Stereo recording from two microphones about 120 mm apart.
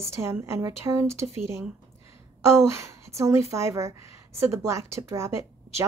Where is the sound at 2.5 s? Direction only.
25° right (ahead or behind).